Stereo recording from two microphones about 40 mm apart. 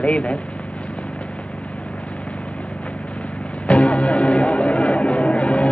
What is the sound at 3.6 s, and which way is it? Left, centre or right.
Music, left.